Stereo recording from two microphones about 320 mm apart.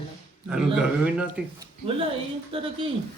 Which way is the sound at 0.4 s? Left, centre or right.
Centre.